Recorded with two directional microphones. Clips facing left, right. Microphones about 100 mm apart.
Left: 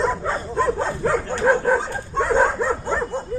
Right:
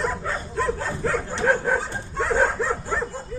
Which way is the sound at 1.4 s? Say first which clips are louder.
Left 3 dB; 5° left (ahead or behind).